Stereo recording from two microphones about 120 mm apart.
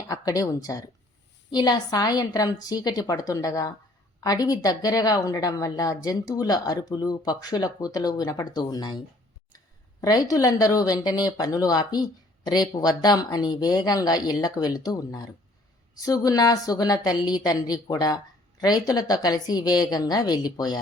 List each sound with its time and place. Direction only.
0.1 s a woman's voice: 30° left (ahead or behind)
10.0 s a woman's voice: 30° left (ahead or behind)